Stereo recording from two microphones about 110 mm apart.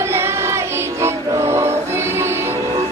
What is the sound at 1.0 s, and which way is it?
Music, 25° right (ahead or behind).